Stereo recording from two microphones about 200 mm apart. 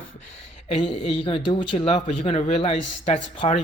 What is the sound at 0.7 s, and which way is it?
A man's voice, 25° left (ahead or behind).